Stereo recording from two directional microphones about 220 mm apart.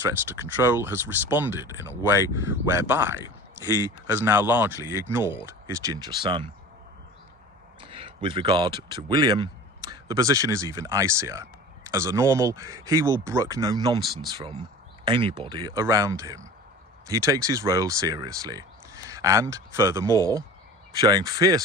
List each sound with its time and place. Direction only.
0.3 s speech: 10° right (ahead or behind)
3.2 s speech: 20° left (ahead or behind)
4.1 s speech: 10° right (ahead or behind)
7.8 s speech: 25° right (ahead or behind)